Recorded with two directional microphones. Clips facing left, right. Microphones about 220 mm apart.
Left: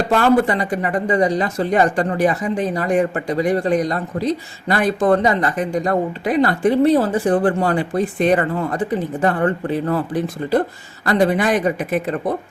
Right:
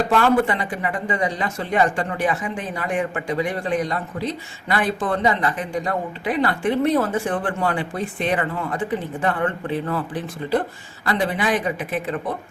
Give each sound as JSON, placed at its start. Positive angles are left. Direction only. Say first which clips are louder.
{"t": 0.1, "sound": "speech", "louder": "left 5 dB", "side_deg": 40}
{"t": 11.0, "sound": "speech", "louder": "left 6 dB", "side_deg": 40}